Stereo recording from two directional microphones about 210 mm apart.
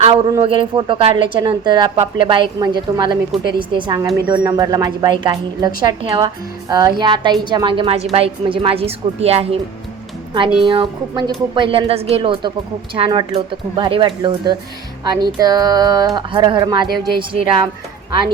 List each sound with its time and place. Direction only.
0.0 s a man's voice: 25° right (ahead or behind)